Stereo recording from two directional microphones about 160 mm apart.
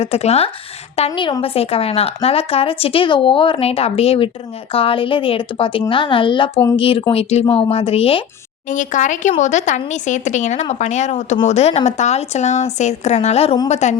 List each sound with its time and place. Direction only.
0.0 s a woman's voice: 40° left (ahead or behind)
8.7 s a woman's voice: 50° left (ahead or behind)